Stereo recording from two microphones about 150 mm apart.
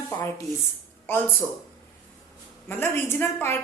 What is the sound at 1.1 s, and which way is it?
Speech, 15° left (ahead or behind).